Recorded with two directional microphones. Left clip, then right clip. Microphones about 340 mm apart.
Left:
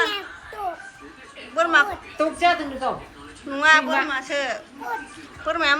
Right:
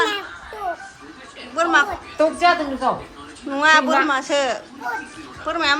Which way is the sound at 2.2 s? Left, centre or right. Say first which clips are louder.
Right 4 dB; right.